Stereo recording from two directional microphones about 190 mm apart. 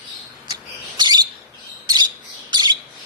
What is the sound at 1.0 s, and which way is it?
Bird, 20° right (ahead or behind).